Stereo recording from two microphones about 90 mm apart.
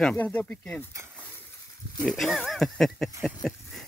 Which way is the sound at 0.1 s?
20° left (ahead or behind).